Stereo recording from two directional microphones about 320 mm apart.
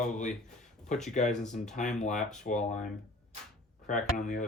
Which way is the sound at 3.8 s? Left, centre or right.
Left.